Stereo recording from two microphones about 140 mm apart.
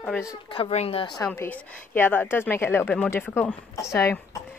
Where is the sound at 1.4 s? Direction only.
10° left (ahead or behind).